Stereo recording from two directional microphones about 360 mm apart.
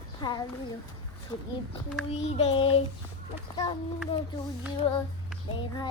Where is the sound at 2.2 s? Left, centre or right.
Centre.